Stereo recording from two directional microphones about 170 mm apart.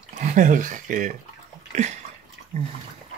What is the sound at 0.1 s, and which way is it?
Speech, 45° right (ahead or behind).